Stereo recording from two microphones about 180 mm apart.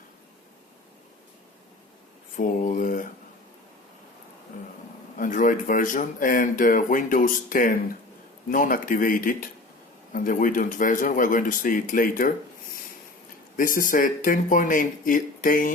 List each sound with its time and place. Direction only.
2.3 s a sound: 45° left (ahead or behind)
5.1 s speech: 45° left (ahead or behind)
13.6 s speech: 50° left (ahead or behind)